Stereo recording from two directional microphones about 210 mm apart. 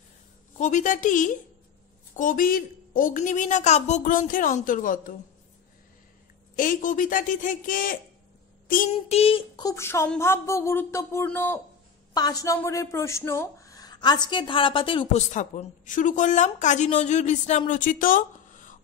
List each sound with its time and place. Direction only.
0.6 s speech: 35° left (ahead or behind)
6.5 s speech: 40° left (ahead or behind)
8.9 s speech: 25° left (ahead or behind)
15.3 s speech: 35° left (ahead or behind)